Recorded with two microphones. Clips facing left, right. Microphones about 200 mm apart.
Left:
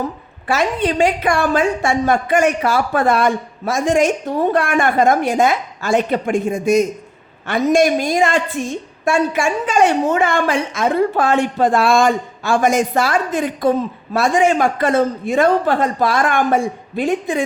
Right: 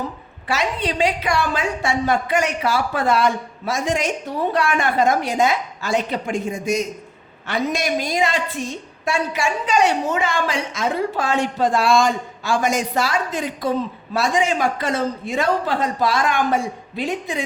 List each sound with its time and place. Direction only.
0.4 s a woman's voice: 50° left (ahead or behind)